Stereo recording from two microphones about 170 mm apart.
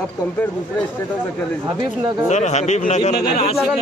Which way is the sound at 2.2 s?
45° left (ahead or behind).